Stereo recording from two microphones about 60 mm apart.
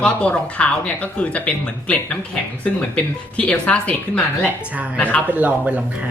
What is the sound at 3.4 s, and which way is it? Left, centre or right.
Speech, left.